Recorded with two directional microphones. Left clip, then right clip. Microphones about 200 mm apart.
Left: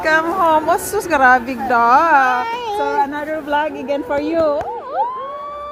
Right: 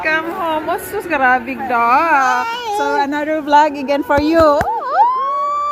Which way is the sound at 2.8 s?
40° right (ahead or behind).